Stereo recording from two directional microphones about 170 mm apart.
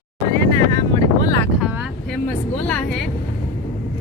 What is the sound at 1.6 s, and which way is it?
Vehicle, 5° right (ahead or behind).